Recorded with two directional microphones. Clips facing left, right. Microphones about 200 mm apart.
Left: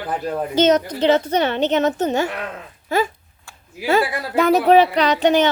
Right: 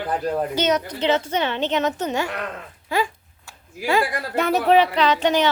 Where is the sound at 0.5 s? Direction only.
45° left (ahead or behind).